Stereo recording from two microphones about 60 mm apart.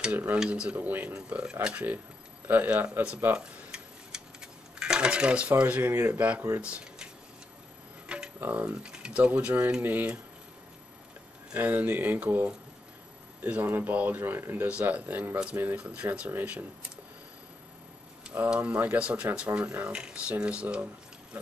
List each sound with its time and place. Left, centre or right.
0.1 s speech: right
0.4 s speech: centre
1.1 s speech: centre
3.3 s a sound: centre
8.1 s tick-tock: centre
8.5 s speech: right
11.5 s speech: right
14.7 s speech: right
18.5 s speech: right